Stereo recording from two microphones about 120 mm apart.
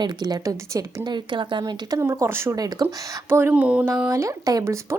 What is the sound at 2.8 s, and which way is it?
Speech, 20° right (ahead or behind).